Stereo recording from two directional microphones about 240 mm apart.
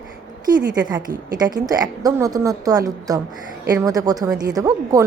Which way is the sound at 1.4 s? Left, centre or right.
Centre.